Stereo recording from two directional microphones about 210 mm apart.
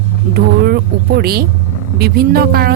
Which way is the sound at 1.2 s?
45° right (ahead or behind).